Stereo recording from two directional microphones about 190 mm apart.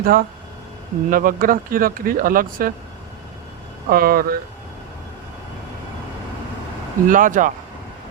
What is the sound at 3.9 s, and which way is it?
Speech, 50° right (ahead or behind).